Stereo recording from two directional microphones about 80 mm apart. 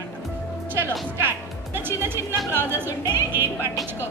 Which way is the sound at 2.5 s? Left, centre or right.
Right.